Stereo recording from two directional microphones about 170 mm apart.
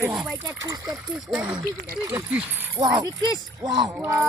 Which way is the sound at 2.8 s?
25° right (ahead or behind).